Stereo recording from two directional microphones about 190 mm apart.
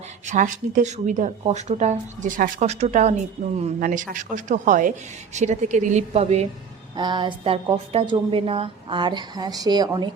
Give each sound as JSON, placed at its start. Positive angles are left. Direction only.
{"t": 0.3, "sound": "speech", "side_deg": -45}
{"t": 6.9, "sound": "a woman's voice", "side_deg": -25}